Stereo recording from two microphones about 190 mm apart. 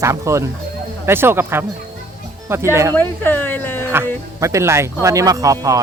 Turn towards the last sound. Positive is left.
turn(degrees=-15)  # may be behind; listen again after turning